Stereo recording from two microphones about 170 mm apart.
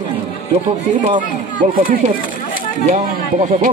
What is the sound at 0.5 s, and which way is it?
Speech, 45° right (ahead or behind).